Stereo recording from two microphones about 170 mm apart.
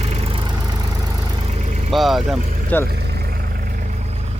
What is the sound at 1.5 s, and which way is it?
Vehicle, 40° right (ahead or behind).